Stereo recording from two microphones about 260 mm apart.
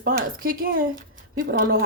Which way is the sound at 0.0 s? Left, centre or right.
Right.